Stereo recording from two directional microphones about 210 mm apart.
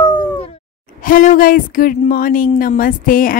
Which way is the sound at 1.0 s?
40° left (ahead or behind).